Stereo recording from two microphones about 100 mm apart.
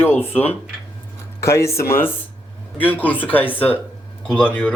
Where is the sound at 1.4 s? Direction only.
30° left (ahead or behind).